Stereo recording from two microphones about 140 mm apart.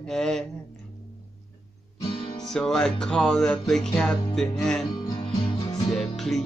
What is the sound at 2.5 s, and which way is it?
Music, 5° left (ahead or behind).